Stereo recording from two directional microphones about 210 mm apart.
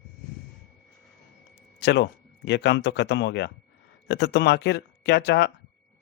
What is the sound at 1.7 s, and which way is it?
A man's voice, 55° left (ahead or behind).